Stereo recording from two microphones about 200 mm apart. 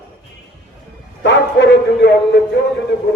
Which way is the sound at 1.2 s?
60° left (ahead or behind).